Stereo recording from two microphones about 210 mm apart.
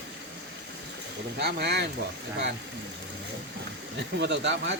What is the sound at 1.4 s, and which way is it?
Speech, 50° right (ahead or behind).